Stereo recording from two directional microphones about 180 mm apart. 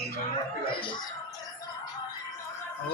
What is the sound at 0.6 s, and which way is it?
Speech, 30° left (ahead or behind).